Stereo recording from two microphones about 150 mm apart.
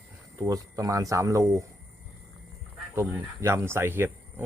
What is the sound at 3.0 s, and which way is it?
Speech, 15° right (ahead or behind).